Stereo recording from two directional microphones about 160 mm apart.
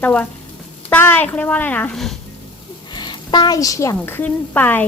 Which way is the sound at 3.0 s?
25° left (ahead or behind).